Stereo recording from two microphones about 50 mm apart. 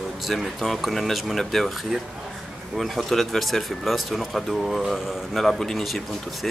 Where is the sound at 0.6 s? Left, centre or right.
Centre.